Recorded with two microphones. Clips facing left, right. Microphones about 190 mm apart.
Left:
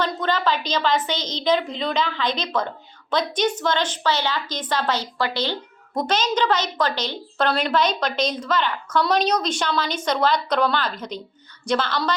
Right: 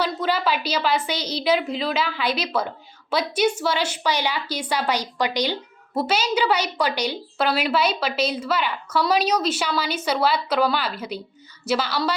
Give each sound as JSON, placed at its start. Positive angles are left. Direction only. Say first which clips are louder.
{"t": 0.0, "sound": "a woman's voice", "louder": "even", "side_deg": -10}